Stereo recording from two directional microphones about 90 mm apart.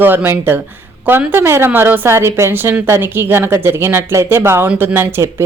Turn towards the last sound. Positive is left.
turn(degrees=-25)  # may be behind; listen again after turning